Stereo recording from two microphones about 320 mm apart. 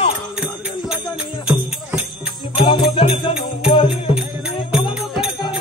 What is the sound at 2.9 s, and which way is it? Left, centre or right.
Music, centre.